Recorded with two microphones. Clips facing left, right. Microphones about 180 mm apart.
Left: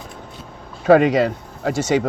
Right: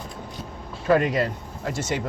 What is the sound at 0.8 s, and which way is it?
Speech, 90° left.